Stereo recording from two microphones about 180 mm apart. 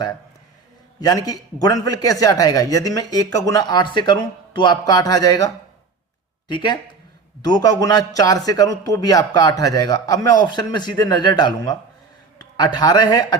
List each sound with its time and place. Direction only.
0.9 s a man's voice: 20° left (ahead or behind)
6.5 s a man's voice: 25° left (ahead or behind)